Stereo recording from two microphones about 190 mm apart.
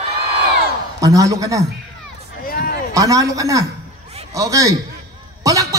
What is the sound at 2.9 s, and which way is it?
A man's voice, 20° right (ahead or behind).